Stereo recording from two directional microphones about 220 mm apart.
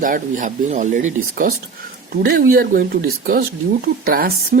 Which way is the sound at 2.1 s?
45° right (ahead or behind).